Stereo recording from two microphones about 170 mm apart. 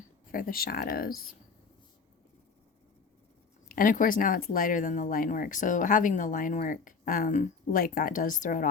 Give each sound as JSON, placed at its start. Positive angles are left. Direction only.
{"t": 0.3, "sound": "speech", "side_deg": 60}
{"t": 3.7, "sound": "speech", "side_deg": 55}